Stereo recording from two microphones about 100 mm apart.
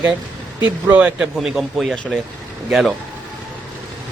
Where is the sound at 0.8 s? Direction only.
15° right (ahead or behind).